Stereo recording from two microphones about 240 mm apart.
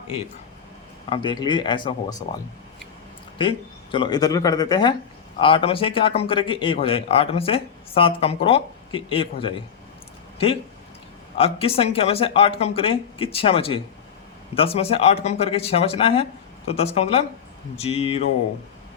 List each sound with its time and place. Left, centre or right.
1.1 s speech: centre
3.9 s speech: centre